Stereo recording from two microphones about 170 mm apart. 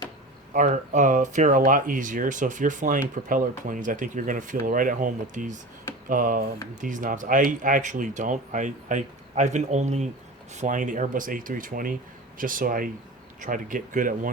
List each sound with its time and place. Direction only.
0.5 s speech: 50° right (ahead or behind)